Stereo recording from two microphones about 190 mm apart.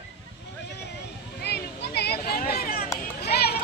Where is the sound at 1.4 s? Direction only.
60° left (ahead or behind).